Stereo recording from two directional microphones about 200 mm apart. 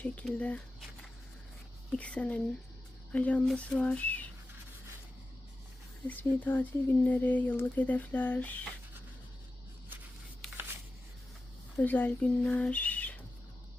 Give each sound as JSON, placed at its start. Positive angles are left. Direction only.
{"t": 0.0, "sound": "speech", "side_deg": 5}
{"t": 1.9, "sound": "speech", "side_deg": 5}
{"t": 6.1, "sound": "speech", "side_deg": 10}
{"t": 11.8, "sound": "speech", "side_deg": 10}